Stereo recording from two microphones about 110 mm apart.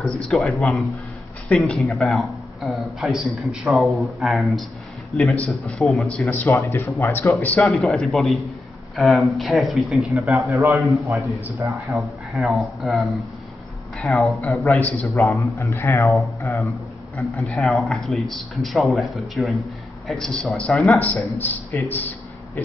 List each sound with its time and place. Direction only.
0.2 s a man's voice: centre (ahead or behind)
6.5 s speech: 20° left (ahead or behind)
7.8 s a man's voice: centre (ahead or behind)
10.5 s a man's voice: 30° right (ahead or behind)
11.9 s a man's voice: centre (ahead or behind)
14.8 s a man's voice: 10° left (ahead or behind)
15.0 s speech: 25° left (ahead or behind)
17.2 s a man's voice: centre (ahead or behind); by 22.1 s 15° left (ahead or behind)